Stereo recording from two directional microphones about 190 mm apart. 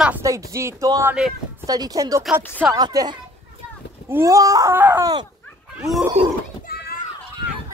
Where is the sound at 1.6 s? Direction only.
20° right (ahead or behind).